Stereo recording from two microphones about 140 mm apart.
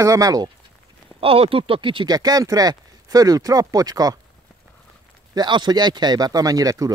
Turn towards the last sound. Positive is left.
turn(degrees=-25)  # may be behind; listen again after turning